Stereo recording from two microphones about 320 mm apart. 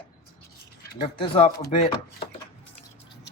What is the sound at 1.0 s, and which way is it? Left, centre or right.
Speech, centre.